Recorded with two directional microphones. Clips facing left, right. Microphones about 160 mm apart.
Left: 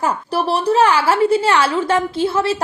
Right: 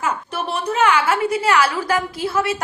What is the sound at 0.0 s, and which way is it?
A woman's voice, 35° left (ahead or behind).